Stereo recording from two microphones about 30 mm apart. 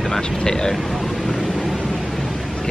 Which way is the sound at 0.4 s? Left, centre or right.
Left.